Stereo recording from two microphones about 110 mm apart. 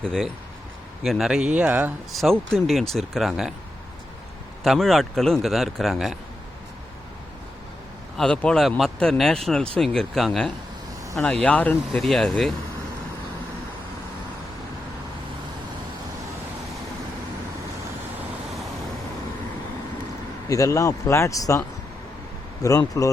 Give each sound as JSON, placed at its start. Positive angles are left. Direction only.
{"t": 0.0, "sound": "speech", "side_deg": 5}
{"t": 2.1, "sound": "speech", "side_deg": 5}
{"t": 4.6, "sound": "speech", "side_deg": 0}
{"t": 8.2, "sound": "speech", "side_deg": 10}
{"t": 11.9, "sound": "speech", "side_deg": 5}
{"t": 20.5, "sound": "speech", "side_deg": 30}
{"t": 22.6, "sound": "speech", "side_deg": 30}